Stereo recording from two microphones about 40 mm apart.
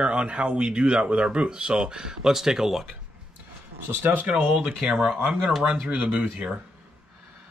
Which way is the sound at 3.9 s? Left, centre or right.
Right.